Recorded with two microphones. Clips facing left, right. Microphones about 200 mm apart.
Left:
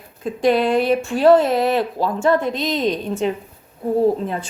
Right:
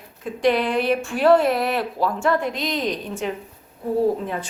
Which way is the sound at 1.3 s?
20° left (ahead or behind).